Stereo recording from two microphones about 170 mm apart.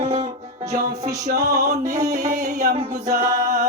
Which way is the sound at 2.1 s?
70° right (ahead or behind).